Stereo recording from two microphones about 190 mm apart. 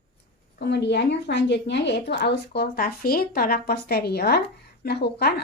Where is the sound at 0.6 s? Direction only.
65° left (ahead or behind).